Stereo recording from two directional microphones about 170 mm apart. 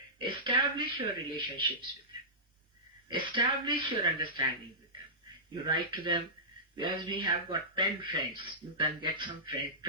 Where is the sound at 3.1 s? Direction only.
30° right (ahead or behind).